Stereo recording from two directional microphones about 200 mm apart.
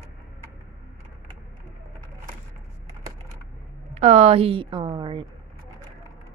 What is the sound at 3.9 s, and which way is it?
A woman's voice, 35° right (ahead or behind).